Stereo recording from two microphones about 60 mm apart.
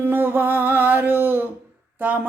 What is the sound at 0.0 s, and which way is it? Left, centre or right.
Music, right.